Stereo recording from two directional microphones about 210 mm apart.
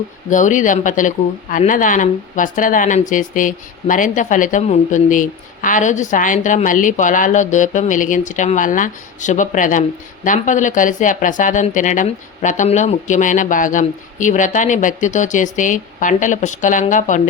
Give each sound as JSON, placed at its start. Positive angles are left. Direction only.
{"t": 0.3, "sound": "a woman's voice", "side_deg": 35}